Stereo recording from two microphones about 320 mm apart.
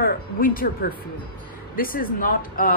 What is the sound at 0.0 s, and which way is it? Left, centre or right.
Speech, left.